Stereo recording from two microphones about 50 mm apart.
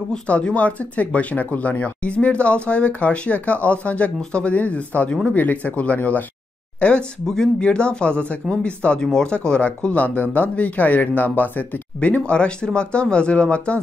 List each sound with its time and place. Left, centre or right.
0.3 s speech: left
6.8 s speech: left